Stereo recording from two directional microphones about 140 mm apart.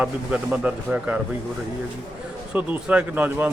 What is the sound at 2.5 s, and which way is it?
Speech, 10° right (ahead or behind).